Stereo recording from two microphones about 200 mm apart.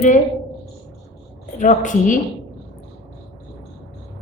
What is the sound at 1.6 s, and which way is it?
Speech, 40° left (ahead or behind).